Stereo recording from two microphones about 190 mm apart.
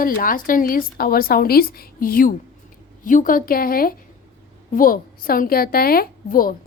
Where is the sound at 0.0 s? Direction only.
45° left (ahead or behind).